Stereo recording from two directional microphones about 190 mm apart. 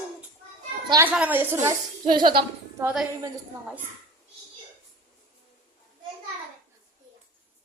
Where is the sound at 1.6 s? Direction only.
25° right (ahead or behind).